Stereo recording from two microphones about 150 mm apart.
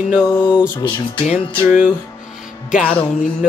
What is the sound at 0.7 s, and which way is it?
Speech, 30° left (ahead or behind).